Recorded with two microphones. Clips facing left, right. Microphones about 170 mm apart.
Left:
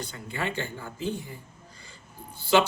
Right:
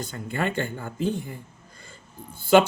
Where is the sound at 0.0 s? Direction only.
50° right (ahead or behind).